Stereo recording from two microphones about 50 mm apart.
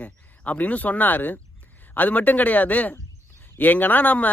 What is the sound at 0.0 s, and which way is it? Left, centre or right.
Speech, left.